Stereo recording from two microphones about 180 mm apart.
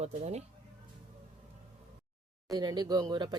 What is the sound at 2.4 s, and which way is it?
Speech, 20° right (ahead or behind).